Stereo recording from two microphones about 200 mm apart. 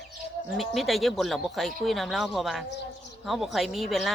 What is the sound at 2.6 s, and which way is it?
Speech, 60° left (ahead or behind).